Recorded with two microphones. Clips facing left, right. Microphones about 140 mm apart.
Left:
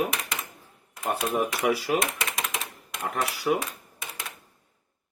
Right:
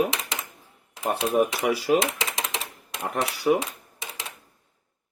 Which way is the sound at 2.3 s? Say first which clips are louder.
Right 1 dB; 25° right (ahead or behind).